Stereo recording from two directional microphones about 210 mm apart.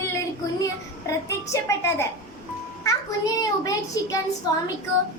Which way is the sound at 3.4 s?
15° left (ahead or behind).